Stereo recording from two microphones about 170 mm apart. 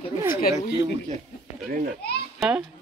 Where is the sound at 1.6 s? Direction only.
55° right (ahead or behind).